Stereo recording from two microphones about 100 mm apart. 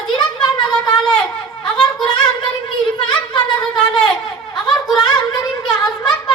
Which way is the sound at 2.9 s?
50° left (ahead or behind).